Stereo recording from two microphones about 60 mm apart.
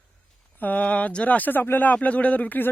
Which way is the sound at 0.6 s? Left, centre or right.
Left.